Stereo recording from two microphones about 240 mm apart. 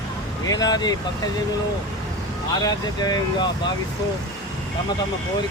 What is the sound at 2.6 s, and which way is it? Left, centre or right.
Speech, centre.